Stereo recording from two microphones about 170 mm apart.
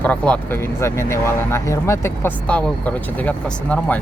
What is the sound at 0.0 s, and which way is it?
Speech, 10° left (ahead or behind).